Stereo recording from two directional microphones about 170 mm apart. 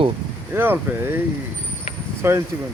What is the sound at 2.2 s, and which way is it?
Speech, 15° right (ahead or behind).